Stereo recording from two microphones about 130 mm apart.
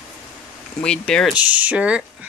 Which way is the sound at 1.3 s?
10° right (ahead or behind).